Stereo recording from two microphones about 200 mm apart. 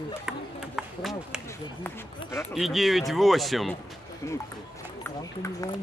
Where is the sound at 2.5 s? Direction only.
Centre (ahead or behind).